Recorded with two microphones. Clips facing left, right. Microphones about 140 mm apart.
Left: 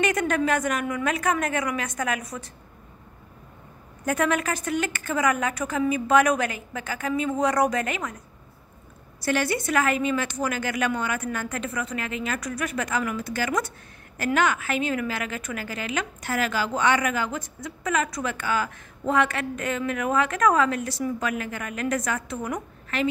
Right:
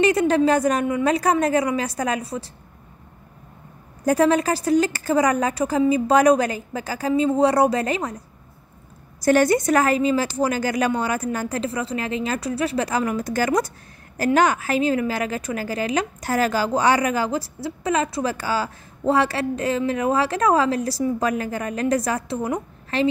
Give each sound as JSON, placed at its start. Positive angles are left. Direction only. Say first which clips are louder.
{"t": 0.0, "sound": "a woman's voice", "louder": "right 6 dB", "side_deg": -30}
{"t": 4.0, "sound": "a woman's voice", "louder": "right 6 dB", "side_deg": -35}
{"t": 9.2, "sound": "a woman's voice", "louder": "right 8 dB", "side_deg": -45}